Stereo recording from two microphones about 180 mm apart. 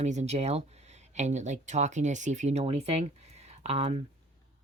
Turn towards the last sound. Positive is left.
turn(degrees=-35)  # may be behind; listen again after turning